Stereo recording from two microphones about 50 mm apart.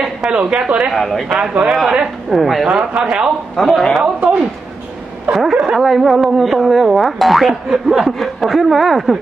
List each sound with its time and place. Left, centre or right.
0.0 s speech: centre
0.9 s boing: centre
1.3 s speech: right
2.3 s boing: centre
2.9 s speech: centre
3.6 s boing: centre
4.2 s speech: right
5.3 s speech: centre
5.8 s boing: centre